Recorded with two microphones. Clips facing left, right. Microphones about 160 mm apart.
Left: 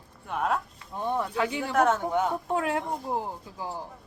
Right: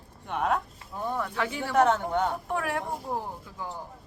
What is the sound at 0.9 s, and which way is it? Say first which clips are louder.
Speech: left 2 dB; 20° left (ahead or behind).